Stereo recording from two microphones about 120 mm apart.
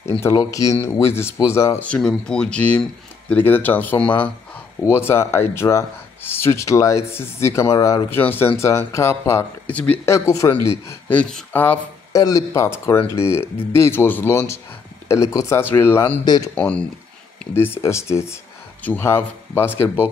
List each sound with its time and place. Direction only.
0.2 s speech: 25° left (ahead or behind)
1.8 s speech: 10° left (ahead or behind); by 8.2 s 25° left (ahead or behind)
8.2 s speech: 15° left (ahead or behind)
10.0 s speech: 25° left (ahead or behind)
11.1 s speech: 5° left (ahead or behind)
11.5 s speech: 15° left (ahead or behind)
12.1 s speech: 30° left (ahead or behind)